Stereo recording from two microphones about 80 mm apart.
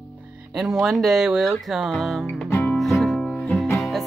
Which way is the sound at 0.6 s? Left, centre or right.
Centre.